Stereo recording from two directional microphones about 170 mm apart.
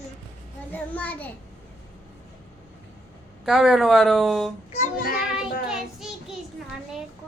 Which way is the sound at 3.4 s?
Centre (ahead or behind).